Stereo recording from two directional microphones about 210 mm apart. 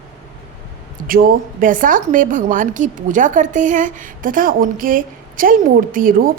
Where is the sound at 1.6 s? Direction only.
40° right (ahead or behind).